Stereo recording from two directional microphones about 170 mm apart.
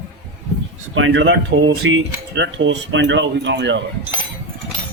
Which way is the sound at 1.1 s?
90° right.